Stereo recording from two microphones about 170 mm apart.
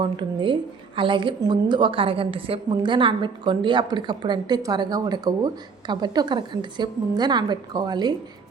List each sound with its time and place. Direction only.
0.0 s a woman's voice: 30° right (ahead or behind)